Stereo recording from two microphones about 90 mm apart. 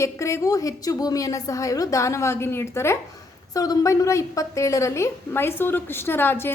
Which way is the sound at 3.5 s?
40° left (ahead or behind).